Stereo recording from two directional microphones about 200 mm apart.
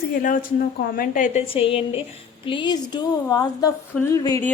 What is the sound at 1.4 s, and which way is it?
A woman's voice, 25° left (ahead or behind).